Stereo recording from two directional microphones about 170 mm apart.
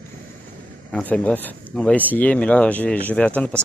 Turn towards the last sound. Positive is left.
turn(degrees=10)  # may be behind; listen again after turning